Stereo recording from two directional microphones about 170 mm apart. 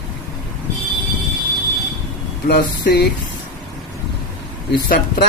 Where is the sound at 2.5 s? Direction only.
70° left (ahead or behind).